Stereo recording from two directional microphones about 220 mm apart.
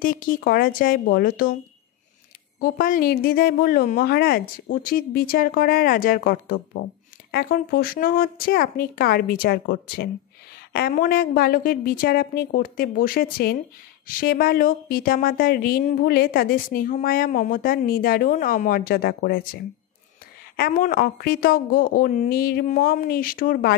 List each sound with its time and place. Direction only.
0.0 s a woman's voice: 40° left (ahead or behind)
2.6 s a woman's voice: 40° left (ahead or behind)